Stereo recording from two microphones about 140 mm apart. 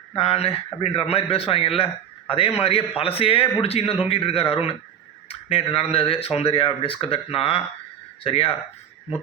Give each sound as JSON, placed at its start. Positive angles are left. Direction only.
{"t": 0.2, "sound": "a man's voice", "side_deg": 45}